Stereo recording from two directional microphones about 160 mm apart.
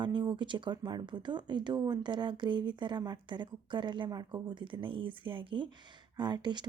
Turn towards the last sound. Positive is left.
turn(degrees=-30)  # may be behind; listen again after turning